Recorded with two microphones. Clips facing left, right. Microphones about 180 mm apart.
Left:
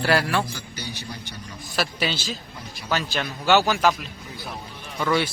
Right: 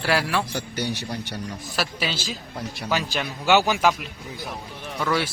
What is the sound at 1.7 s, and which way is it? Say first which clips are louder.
A man's voice: left 2 dB; 5° right (ahead or behind).